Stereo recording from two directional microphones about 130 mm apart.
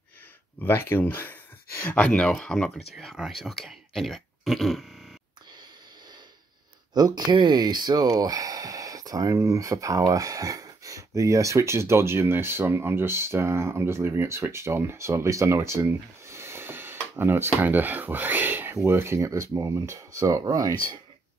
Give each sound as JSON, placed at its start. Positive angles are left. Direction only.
{"t": 0.6, "sound": "speech", "side_deg": 15}
{"t": 2.0, "sound": "speech", "side_deg": 10}
{"t": 6.9, "sound": "speech", "side_deg": -30}